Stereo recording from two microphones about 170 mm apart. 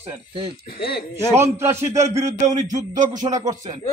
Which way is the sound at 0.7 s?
65° left (ahead or behind).